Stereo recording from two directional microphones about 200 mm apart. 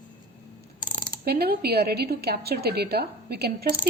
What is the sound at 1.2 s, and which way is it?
A woman's voice, 50° right (ahead or behind).